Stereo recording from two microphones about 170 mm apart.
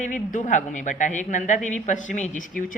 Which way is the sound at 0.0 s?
50° left (ahead or behind).